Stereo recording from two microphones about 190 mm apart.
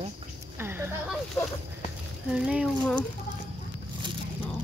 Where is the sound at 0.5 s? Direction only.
10° right (ahead or behind).